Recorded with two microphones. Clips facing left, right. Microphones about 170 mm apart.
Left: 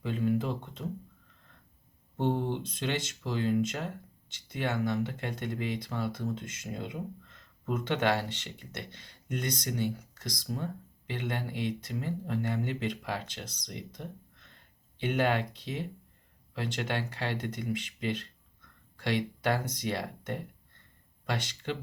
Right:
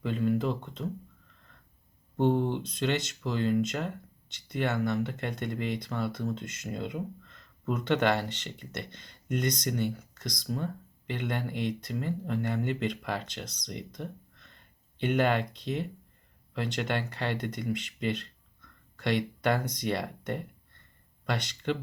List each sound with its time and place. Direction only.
0.1 s speech: 10° left (ahead or behind)
2.3 s speech: 10° left (ahead or behind)
9.6 s speech: 50° right (ahead or behind)
10.2 s speech: 10° left (ahead or behind)
15.0 s speech: 10° left (ahead or behind)
21.3 s speech: 10° left (ahead or behind)